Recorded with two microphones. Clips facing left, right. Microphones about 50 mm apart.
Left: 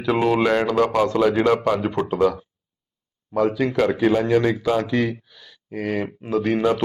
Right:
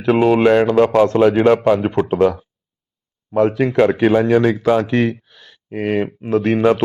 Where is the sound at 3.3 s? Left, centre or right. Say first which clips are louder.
Right 5 dB; right.